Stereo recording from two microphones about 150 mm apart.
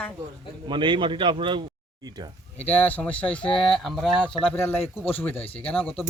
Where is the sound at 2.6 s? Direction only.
10° left (ahead or behind).